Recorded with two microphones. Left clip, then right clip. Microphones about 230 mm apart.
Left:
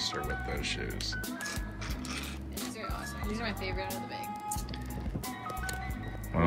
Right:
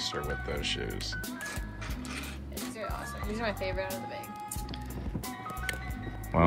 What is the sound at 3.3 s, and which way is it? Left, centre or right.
Speech, centre.